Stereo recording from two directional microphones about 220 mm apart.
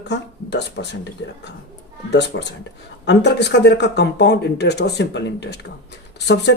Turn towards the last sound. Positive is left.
turn(degrees=50)  # may be behind; listen again after turning